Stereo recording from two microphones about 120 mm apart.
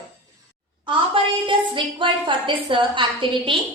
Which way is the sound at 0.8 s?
45° right (ahead or behind).